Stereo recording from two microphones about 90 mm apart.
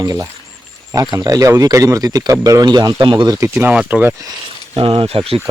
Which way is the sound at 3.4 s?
25° right (ahead or behind).